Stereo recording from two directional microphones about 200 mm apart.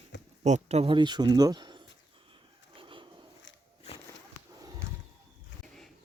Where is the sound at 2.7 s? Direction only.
25° right (ahead or behind).